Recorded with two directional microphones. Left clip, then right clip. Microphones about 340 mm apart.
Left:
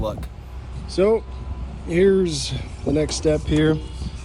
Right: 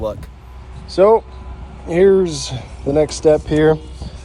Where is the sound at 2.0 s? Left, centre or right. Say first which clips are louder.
Right 6 dB; right.